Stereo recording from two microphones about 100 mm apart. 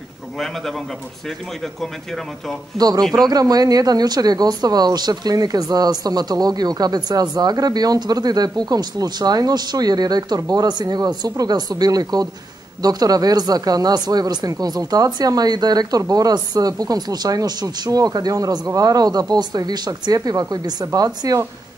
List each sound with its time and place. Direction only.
3.0 s speech: 5° left (ahead or behind)
3.3 s speech: 40° right (ahead or behind)